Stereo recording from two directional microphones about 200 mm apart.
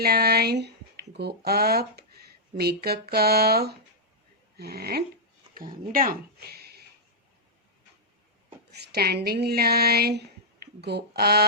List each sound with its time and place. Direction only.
0.0 s speech: 50° right (ahead or behind)
8.7 s a sound: 50° right (ahead or behind)
9.2 s speech: 50° right (ahead or behind)